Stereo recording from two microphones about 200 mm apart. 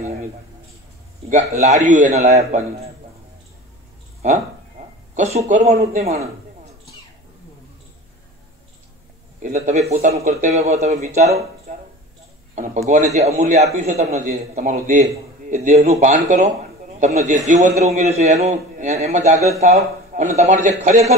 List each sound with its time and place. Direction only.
1.3 s a man's voice: 35° right (ahead or behind)
5.1 s a man's voice: 35° right (ahead or behind)
9.4 s a man's voice: 35° right (ahead or behind)
12.5 s a man's voice: 35° right (ahead or behind)